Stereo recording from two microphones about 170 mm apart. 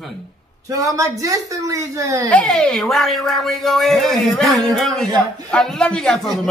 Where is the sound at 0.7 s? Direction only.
20° right (ahead or behind).